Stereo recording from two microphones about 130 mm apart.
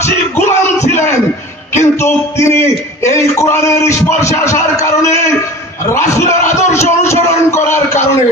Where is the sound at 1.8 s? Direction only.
20° left (ahead or behind).